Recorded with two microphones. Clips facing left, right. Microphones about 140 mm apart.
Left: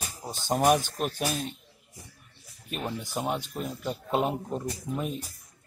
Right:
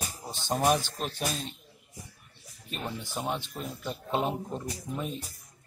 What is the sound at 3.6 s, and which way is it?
Speech, 5° left (ahead or behind).